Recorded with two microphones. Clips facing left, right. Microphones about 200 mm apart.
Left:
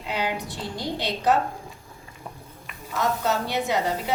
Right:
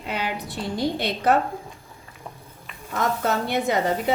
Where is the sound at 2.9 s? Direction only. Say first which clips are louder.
Right 1 dB; 55° right (ahead or behind).